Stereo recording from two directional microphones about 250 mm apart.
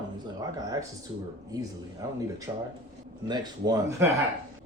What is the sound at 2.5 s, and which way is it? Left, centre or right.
A man's voice, centre.